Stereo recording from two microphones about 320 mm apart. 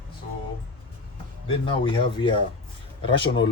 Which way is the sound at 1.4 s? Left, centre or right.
Centre.